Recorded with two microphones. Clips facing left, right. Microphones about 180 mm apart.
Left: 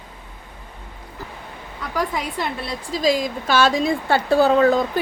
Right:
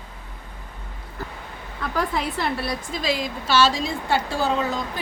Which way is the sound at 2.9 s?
40° left (ahead or behind).